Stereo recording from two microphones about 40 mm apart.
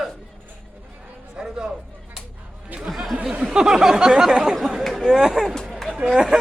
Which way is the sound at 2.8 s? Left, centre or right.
Centre.